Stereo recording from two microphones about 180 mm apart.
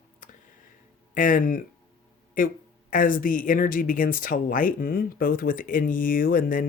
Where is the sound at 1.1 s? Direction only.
50° left (ahead or behind).